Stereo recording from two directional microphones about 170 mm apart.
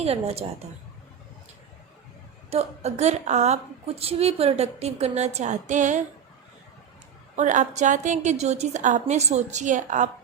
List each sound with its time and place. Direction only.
0.0 s a woman's voice: 35° right (ahead or behind)
2.5 s a woman's voice: 40° right (ahead or behind)
7.3 s a woman's voice: 45° right (ahead or behind)